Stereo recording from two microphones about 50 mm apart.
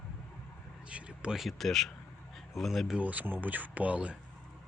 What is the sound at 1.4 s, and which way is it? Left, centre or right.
Speech, centre.